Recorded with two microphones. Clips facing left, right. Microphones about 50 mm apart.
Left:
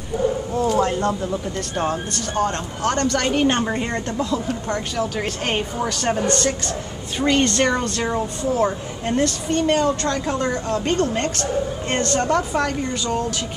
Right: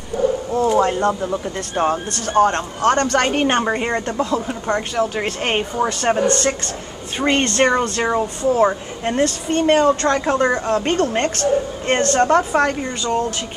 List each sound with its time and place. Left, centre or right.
0.1 s speech: centre
0.6 s speech: centre
2.1 s speech: right